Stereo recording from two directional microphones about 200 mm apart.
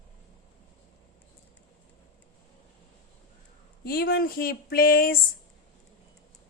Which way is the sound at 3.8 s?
50° left (ahead or behind).